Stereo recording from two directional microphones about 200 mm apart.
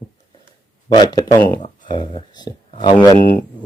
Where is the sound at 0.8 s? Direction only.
20° left (ahead or behind).